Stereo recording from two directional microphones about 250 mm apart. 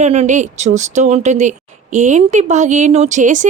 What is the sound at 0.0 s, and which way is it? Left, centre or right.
A woman's voice, right.